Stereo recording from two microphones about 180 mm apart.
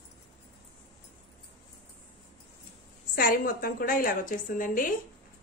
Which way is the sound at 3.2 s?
55° left (ahead or behind).